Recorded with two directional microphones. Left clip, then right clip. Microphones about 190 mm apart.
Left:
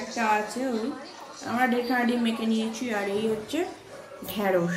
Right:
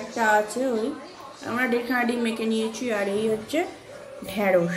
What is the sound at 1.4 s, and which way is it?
A woman's voice, centre (ahead or behind).